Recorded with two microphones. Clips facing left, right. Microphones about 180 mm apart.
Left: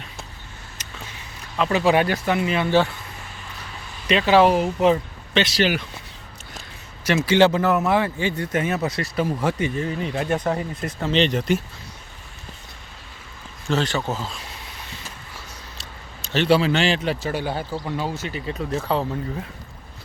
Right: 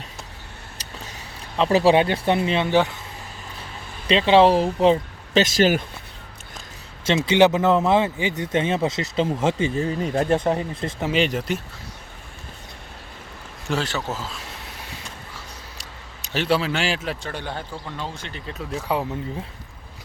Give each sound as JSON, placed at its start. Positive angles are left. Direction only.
{"t": 0.8, "sound": "a sound", "side_deg": -35}
{"t": 2.0, "sound": "speech", "side_deg": -25}
{"t": 2.6, "sound": "speech", "side_deg": -15}
{"t": 3.6, "sound": "speech", "side_deg": -30}
{"t": 7.3, "sound": "speech", "side_deg": -20}
{"t": 10.3, "sound": "speech", "side_deg": -25}
{"t": 11.0, "sound": "a man's voice", "side_deg": -10}
{"t": 13.7, "sound": "a man's voice", "side_deg": -5}
{"t": 15.8, "sound": "speech", "side_deg": -10}
{"t": 17.2, "sound": "speech", "side_deg": 10}